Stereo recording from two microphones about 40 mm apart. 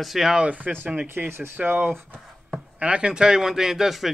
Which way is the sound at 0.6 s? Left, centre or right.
Right.